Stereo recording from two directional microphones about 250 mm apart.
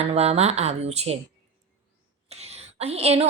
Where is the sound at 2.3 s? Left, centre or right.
Right.